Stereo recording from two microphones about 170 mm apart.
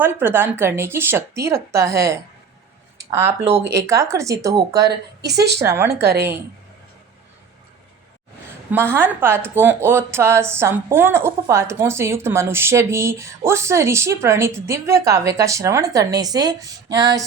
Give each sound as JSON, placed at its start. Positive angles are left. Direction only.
{"t": 0.0, "sound": "speech", "side_deg": -10}
{"t": 3.5, "sound": "speech", "side_deg": -15}
{"t": 4.8, "sound": "a woman's voice", "side_deg": -75}
{"t": 5.6, "sound": "speech", "side_deg": -15}
{"t": 8.7, "sound": "speech", "side_deg": -15}